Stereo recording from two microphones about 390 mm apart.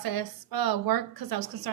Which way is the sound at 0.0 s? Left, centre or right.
Right.